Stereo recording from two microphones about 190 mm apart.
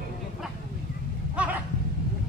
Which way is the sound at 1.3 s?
5° right (ahead or behind).